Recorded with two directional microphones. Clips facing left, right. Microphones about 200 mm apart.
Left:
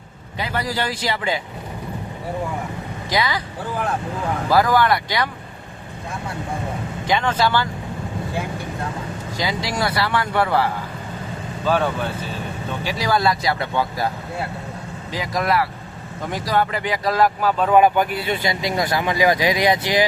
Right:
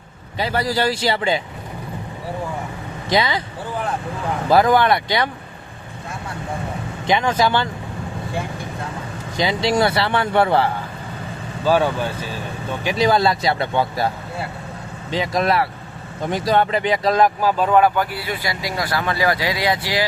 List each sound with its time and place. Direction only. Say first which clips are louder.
0.3 s a man's voice: right 4 dB; 35° right (ahead or behind)
3.1 s speech: right 3 dB; 25° right (ahead or behind)
4.4 s speech: right 2 dB; 25° right (ahead or behind)
7.1 s speech: right 2 dB; 15° right (ahead or behind)
9.4 s speech: right 6 dB; 25° right (ahead or behind)
11.6 s speech: right 3 dB; 10° right (ahead or behind)
12.8 s speech: right 4 dB; 20° right (ahead or behind)
15.1 s speech: right 2 dB; 25° right (ahead or behind)
17.7 s speech: left 1 dB; 15° left (ahead or behind)